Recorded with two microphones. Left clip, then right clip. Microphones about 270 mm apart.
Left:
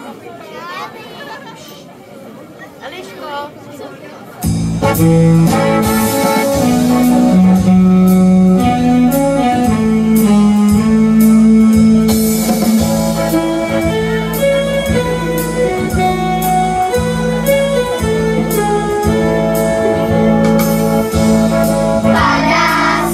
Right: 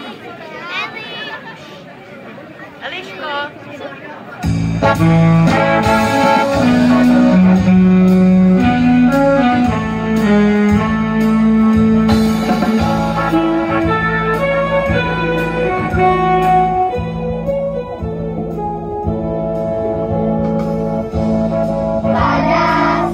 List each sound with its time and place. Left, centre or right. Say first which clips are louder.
4.4 s music: even; left
20.6 s music: left 5 dB; left
21.1 s music: left 4 dB; left
21.5 s music: left 3 dB; left
22.1 s music: left 1 dB; left